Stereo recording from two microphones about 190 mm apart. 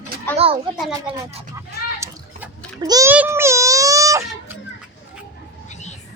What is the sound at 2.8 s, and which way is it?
Speech, 20° right (ahead or behind).